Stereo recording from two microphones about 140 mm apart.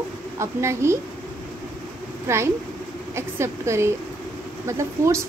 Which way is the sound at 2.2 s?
20° right (ahead or behind).